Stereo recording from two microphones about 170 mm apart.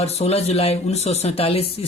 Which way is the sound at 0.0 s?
40° left (ahead or behind).